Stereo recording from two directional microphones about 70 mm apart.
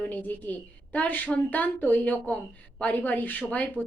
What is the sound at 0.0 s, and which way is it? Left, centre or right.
Speech, left.